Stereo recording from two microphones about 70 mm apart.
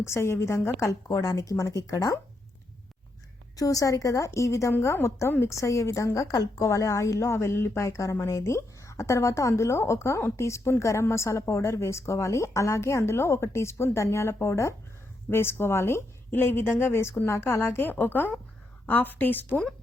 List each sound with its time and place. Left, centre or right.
0.0 s a woman's voice: left
3.5 s a woman's voice: left